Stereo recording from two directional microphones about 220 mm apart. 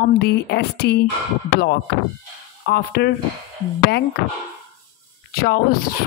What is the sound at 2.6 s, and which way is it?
Speech, 45° left (ahead or behind).